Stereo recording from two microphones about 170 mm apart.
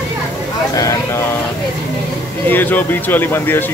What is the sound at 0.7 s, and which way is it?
Speech, 20° left (ahead or behind).